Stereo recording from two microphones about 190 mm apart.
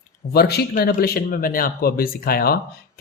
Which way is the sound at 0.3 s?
55° left (ahead or behind).